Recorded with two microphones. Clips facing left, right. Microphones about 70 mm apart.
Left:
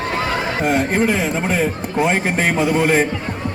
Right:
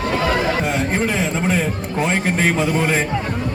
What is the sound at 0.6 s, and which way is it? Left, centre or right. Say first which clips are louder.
Speech: left 3 dB; left.